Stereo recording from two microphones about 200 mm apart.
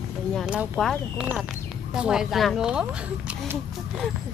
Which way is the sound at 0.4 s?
Centre (ahead or behind).